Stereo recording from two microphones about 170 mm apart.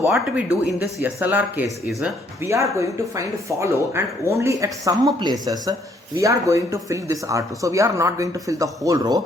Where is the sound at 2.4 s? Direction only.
15° right (ahead or behind).